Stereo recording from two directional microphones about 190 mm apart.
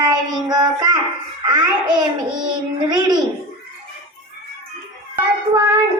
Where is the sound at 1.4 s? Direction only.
20° right (ahead or behind).